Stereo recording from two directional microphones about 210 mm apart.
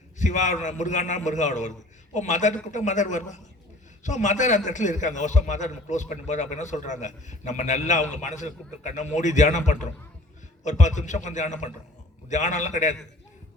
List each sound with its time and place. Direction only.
0.2 s a man's voice: 35° left (ahead or behind)